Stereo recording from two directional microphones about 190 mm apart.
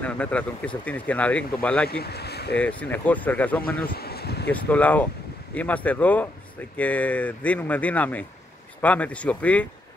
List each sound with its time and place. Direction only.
0.0 s speech: 5° left (ahead or behind)
1.9 s speech: 55° left (ahead or behind)
2.5 s speech: 5° left (ahead or behind)
3.9 s a sound: 55° left (ahead or behind)
4.5 s speech: 10° left (ahead or behind)